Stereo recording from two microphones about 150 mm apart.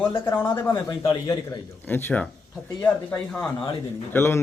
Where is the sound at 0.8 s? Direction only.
25° left (ahead or behind).